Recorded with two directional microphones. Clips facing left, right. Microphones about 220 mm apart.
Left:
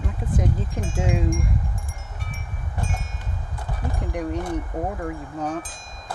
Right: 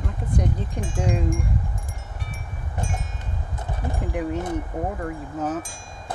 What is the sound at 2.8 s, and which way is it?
Wind chime, 15° right (ahead or behind).